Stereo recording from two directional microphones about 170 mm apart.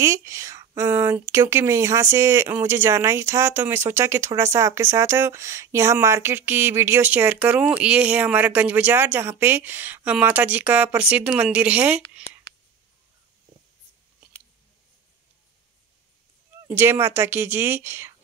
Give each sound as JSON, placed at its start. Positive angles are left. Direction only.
{"t": 0.0, "sound": "speech", "side_deg": -15}
{"t": 12.2, "sound": "a sound", "side_deg": 35}
{"t": 16.6, "sound": "speech", "side_deg": -15}